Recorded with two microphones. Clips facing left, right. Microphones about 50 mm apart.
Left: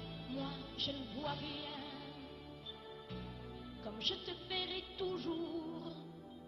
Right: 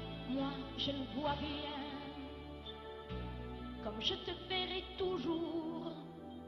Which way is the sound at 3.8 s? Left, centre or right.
Centre.